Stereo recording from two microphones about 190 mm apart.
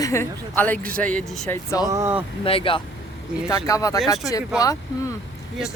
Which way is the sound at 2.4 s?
30° left (ahead or behind).